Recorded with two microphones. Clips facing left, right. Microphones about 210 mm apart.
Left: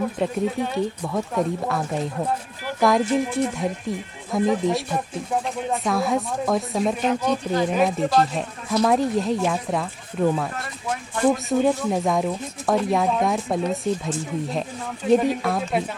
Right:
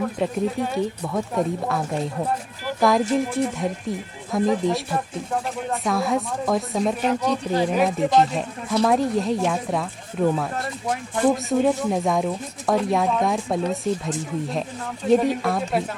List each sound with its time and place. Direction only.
0.0 s speech: centre (ahead or behind)
10.6 s speech: 25° right (ahead or behind)
11.4 s speech: centre (ahead or behind)